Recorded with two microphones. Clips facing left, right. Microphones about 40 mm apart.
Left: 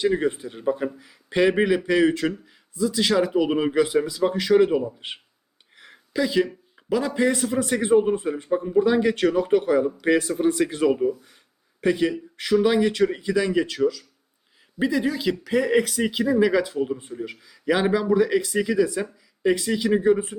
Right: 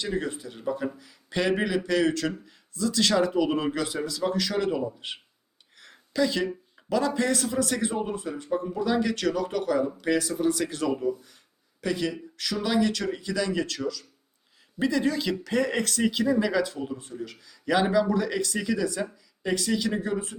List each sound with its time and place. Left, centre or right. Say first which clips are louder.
0.0 s speech: left 8 dB; left